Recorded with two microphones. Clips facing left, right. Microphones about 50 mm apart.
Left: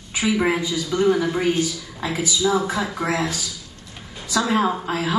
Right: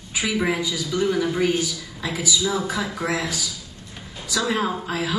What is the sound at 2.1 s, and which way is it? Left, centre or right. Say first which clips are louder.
Speech: left 3 dB; left.